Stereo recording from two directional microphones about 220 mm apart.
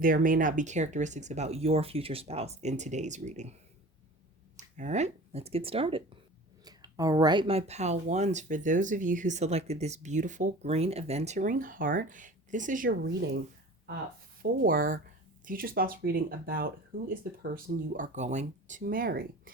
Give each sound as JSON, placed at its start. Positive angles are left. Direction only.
{"t": 0.0, "sound": "speech", "side_deg": -40}
{"t": 4.5, "sound": "speech", "side_deg": -30}
{"t": 14.6, "sound": "speech", "side_deg": -40}